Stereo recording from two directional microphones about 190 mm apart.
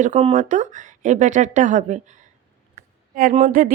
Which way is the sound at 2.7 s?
40° right (ahead or behind).